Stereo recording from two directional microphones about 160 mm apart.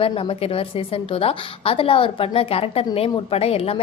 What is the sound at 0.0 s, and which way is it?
A woman's voice, 35° left (ahead or behind).